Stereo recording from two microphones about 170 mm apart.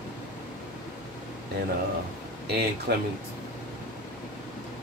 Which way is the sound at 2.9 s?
70° right (ahead or behind).